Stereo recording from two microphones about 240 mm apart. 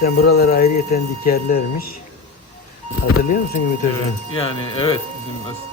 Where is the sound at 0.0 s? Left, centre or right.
Left.